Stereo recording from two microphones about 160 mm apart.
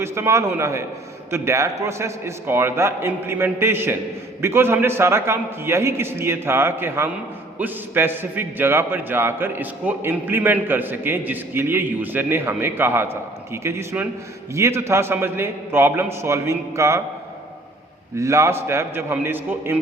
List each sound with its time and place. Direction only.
0.0 s a man's voice: 15° right (ahead or behind)
18.2 s a man's voice: 20° right (ahead or behind)